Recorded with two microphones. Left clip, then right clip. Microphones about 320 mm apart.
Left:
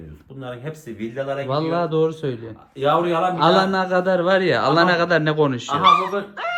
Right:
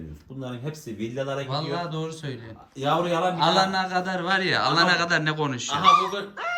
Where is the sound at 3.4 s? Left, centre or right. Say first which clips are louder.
Left 5 dB; centre.